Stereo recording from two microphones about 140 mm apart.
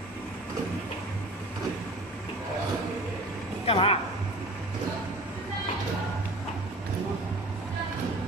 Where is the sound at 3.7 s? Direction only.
45° left (ahead or behind).